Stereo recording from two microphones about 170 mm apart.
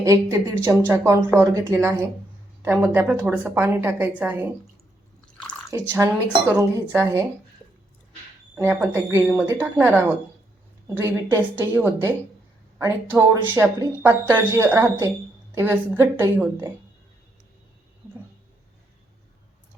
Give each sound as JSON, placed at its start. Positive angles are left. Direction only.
{"t": 0.0, "sound": "speech", "side_deg": -20}
{"t": 5.7, "sound": "speech", "side_deg": -15}
{"t": 8.7, "sound": "speech", "side_deg": -10}